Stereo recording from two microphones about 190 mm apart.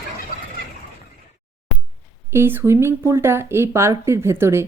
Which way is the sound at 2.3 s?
10° right (ahead or behind).